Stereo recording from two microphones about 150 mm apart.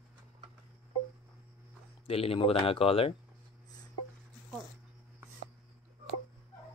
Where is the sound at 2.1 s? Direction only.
40° left (ahead or behind).